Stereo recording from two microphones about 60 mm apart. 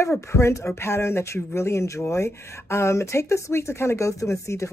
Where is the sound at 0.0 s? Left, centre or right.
Left.